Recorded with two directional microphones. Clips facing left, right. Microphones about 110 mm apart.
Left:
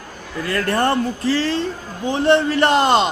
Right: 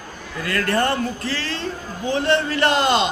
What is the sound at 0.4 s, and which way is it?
Speech, 25° left (ahead or behind).